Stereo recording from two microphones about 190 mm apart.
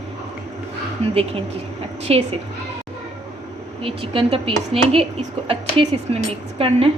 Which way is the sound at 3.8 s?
30° right (ahead or behind).